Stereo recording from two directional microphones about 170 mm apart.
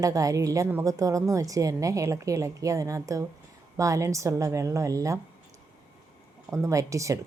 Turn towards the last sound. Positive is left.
turn(degrees=-20)  # may be behind; listen again after turning